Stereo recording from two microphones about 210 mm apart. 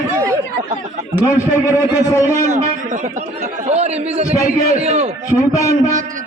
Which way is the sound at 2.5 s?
35° right (ahead or behind).